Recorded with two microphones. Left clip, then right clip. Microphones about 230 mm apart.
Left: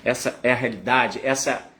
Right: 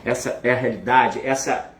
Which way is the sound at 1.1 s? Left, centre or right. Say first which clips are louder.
Right 1 dB; left.